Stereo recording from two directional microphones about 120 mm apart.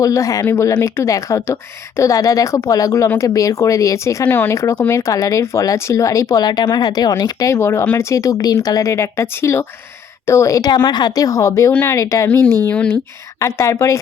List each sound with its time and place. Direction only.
0.0 s speech: 25° left (ahead or behind)
11.7 s speech: 15° left (ahead or behind)
11.9 s speech: 25° left (ahead or behind)
12.6 s speech: 10° left (ahead or behind)
13.6 s speech: 25° left (ahead or behind)